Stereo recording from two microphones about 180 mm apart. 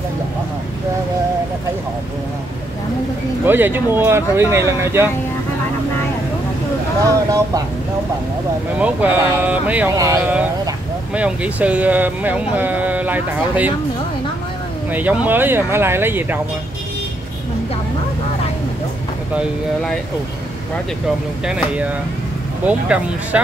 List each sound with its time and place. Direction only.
3.4 s speech: 10° right (ahead or behind)
7.2 s speech: 20° right (ahead or behind)
8.7 s speech: 10° right (ahead or behind)
9.9 s speech: 20° right (ahead or behind)
11.1 s speech: 5° right (ahead or behind)
14.9 s speech: 10° right (ahead or behind)
21.5 s speech: 5° right (ahead or behind)